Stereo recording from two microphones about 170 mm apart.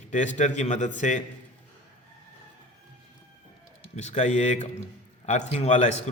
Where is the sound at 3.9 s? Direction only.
40° left (ahead or behind).